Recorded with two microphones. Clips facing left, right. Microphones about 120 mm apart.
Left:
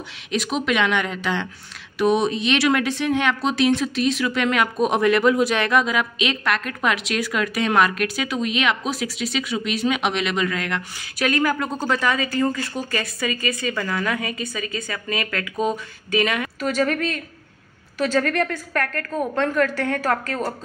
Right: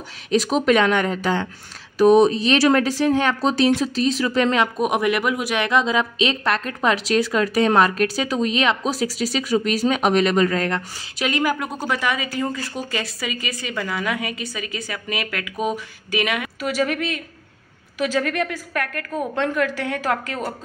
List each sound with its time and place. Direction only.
0.3 s a woman's voice: 35° right (ahead or behind)
4.7 s a woman's voice: 15° right (ahead or behind); by 10.8 s 35° right (ahead or behind)
11.1 s speech: 20° right (ahead or behind)